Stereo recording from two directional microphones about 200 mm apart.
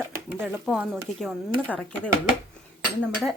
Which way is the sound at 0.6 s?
Centre (ahead or behind).